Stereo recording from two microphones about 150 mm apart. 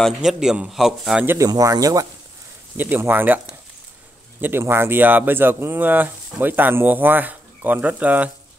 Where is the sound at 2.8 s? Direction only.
15° right (ahead or behind).